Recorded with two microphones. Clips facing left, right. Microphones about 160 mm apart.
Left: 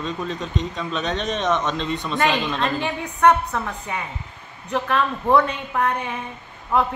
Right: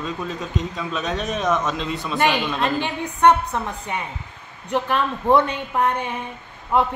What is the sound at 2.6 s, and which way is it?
A woman's voice, 25° right (ahead or behind).